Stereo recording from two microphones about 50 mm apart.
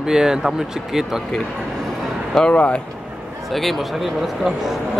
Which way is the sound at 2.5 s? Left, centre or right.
Left.